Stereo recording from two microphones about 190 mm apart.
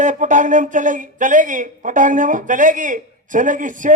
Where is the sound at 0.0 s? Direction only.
40° right (ahead or behind).